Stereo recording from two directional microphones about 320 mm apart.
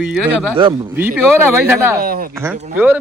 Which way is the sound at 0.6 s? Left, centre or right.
Centre.